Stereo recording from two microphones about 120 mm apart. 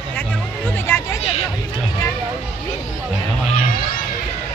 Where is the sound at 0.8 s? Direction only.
20° left (ahead or behind).